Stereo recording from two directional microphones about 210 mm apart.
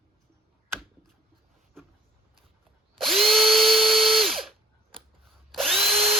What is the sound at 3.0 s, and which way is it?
Drill, centre (ahead or behind).